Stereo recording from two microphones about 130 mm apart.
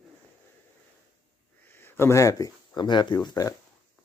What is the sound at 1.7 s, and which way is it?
Speech, 15° left (ahead or behind).